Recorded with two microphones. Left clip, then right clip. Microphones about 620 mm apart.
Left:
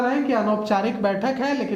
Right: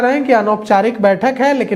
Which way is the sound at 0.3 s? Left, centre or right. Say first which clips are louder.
Right 9 dB; right.